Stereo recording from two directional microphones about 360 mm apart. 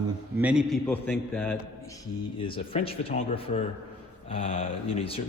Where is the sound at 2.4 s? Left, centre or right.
Centre.